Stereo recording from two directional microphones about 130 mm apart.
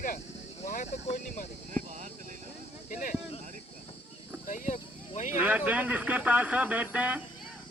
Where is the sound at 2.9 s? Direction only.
85° left.